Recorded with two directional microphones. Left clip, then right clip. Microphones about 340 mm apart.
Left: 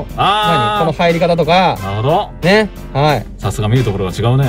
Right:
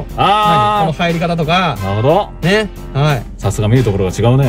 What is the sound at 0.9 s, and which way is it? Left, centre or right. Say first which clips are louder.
Speech: left 4 dB; centre.